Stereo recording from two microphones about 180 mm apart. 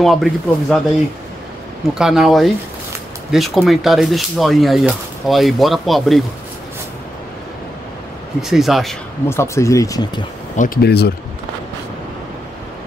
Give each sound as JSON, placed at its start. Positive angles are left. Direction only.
{"t": 0.0, "sound": "speech", "side_deg": 0}
{"t": 2.0, "sound": "speech", "side_deg": 0}
{"t": 8.4, "sound": "speech", "side_deg": 0}
{"t": 9.3, "sound": "speech", "side_deg": 15}
{"t": 10.5, "sound": "speech", "side_deg": 45}
{"t": 10.8, "sound": "speech", "side_deg": 65}